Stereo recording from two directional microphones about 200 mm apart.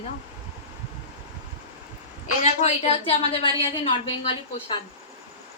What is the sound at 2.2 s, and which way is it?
A woman's voice, 35° left (ahead or behind).